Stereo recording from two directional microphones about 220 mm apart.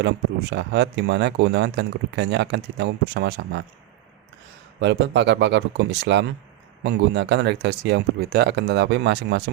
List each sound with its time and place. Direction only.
0.5 s speech: 50° right (ahead or behind)
4.8 s speech: 50° right (ahead or behind)